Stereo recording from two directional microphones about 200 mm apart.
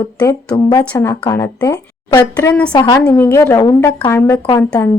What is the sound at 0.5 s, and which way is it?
A woman's voice, 20° left (ahead or behind).